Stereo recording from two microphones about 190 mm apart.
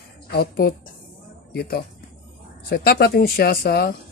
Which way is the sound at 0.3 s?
55° left (ahead or behind).